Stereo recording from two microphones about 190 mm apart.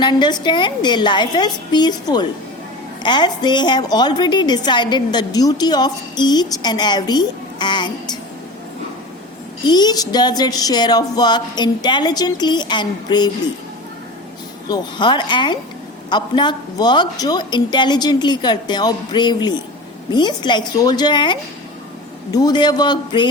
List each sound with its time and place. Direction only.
0.0 s a woman's voice: 25° left (ahead or behind)
9.6 s a woman's voice: 20° left (ahead or behind)
14.7 s a woman's voice: 25° left (ahead or behind)